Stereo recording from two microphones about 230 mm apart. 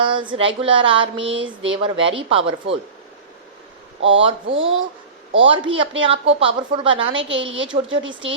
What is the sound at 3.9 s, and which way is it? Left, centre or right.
Speech, right.